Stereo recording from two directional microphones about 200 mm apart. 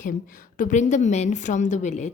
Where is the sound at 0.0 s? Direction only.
45° left (ahead or behind).